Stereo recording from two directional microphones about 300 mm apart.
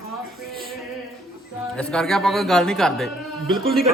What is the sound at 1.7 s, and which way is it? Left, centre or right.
A woman's voice, centre.